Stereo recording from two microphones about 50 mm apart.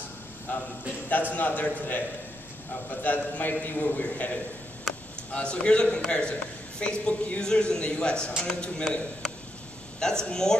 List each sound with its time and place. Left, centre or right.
0.5 s a man's voice: left
4.0 s a man's voice: left